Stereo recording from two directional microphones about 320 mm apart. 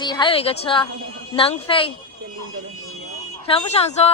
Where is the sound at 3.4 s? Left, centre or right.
Centre.